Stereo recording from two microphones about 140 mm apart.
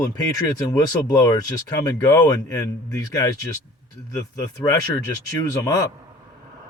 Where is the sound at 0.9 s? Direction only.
25° left (ahead or behind).